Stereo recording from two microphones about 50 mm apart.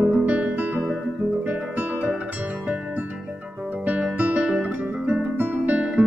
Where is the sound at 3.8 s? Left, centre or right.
Right.